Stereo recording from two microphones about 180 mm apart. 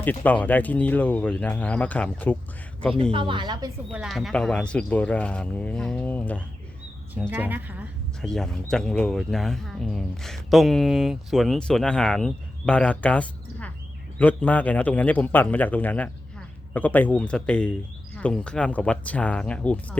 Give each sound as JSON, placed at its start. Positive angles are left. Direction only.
{"t": 0.0, "sound": "speech", "side_deg": 10}
{"t": 3.1, "sound": "a woman's voice", "side_deg": -30}
{"t": 3.9, "sound": "speech", "side_deg": 0}
{"t": 7.1, "sound": "a woman's voice", "side_deg": -10}
{"t": 8.2, "sound": "speech", "side_deg": 5}